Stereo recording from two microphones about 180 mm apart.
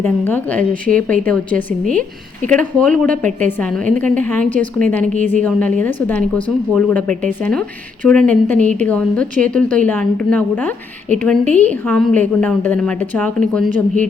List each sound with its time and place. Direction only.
0.0 s a woman's voice: 10° left (ahead or behind)
5.1 s a woman's voice: 45° right (ahead or behind)
5.4 s a woman's voice: 5° left (ahead or behind)